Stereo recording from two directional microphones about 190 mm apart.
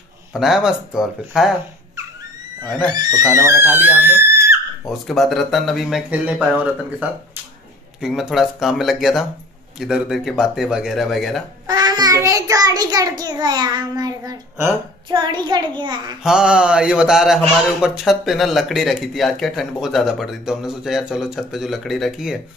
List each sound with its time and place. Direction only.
0.3 s speech: centre (ahead or behind)
2.6 s a child's voice: 20° right (ahead or behind)
4.8 s speech: centre (ahead or behind)
11.6 s a child's voice: 20° right (ahead or behind)
16.2 s speech: 5° right (ahead or behind)